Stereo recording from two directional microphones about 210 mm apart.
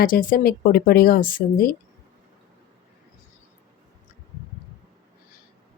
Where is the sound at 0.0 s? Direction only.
40° left (ahead or behind).